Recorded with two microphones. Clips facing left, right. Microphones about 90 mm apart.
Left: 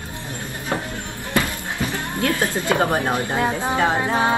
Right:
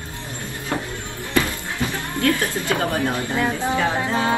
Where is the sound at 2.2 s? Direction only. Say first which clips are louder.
Right 1 dB; 20° left (ahead or behind).